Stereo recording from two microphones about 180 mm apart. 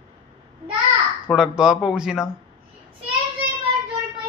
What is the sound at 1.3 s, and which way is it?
Speech, 5° right (ahead or behind).